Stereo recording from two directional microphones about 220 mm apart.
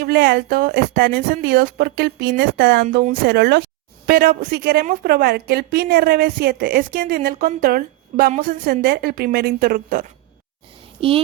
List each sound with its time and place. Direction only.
0.0 s a woman's voice: 45° right (ahead or behind)
2.9 s speech: 40° right (ahead or behind)
3.2 s a woman's voice: 50° right (ahead or behind)
11.0 s child singing: 25° right (ahead or behind)